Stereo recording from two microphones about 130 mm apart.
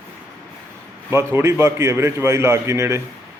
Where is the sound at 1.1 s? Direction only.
20° right (ahead or behind).